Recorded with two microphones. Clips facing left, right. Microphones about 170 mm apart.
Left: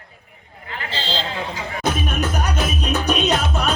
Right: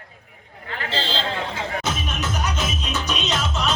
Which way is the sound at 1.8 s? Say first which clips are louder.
Left 5 dB; 60° left (ahead or behind).